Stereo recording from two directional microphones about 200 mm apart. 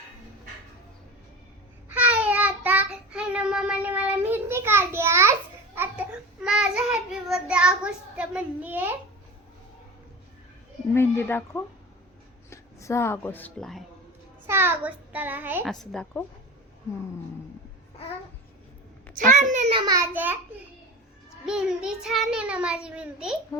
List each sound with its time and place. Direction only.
1.9 s child singing: 5° right (ahead or behind)
6.4 s child singing: 5° right (ahead or behind)
8.1 s a sound: 5° right (ahead or behind)
10.9 s a woman's voice: 10° left (ahead or behind)
14.4 s a child's voice: 10° right (ahead or behind)
15.7 s a child's voice: centre (ahead or behind)
19.1 s a child's voice: 40° right (ahead or behind)
19.8 s a child's voice: 15° right (ahead or behind)
21.4 s a child's voice: 5° right (ahead or behind)
23.5 s a child's voice: 20° left (ahead or behind)